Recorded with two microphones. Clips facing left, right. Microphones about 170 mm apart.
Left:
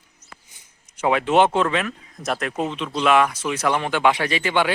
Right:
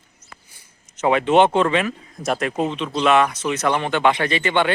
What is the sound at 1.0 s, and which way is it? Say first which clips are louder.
Speech: right 2 dB; 5° left (ahead or behind).